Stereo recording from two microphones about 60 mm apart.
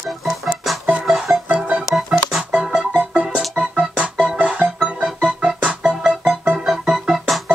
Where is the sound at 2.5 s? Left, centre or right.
Centre.